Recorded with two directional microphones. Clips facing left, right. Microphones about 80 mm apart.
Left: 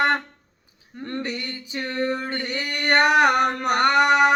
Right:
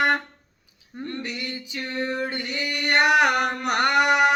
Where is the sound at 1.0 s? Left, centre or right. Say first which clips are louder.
Left 2 dB; left.